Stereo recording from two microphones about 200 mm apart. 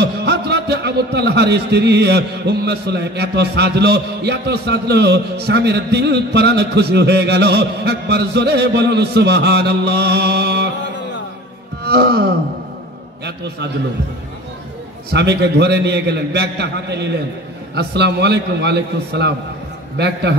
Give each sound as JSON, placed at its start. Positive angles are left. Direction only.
{"t": 0.0, "sound": "a man's voice", "side_deg": -55}
{"t": 11.8, "sound": "wail", "side_deg": -55}
{"t": 15.0, "sound": "a man's voice", "side_deg": -55}